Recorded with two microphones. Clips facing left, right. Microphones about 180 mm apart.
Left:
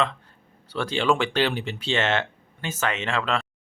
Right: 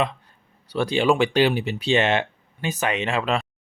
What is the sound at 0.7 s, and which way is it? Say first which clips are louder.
Speech: right 3 dB; 15° right (ahead or behind).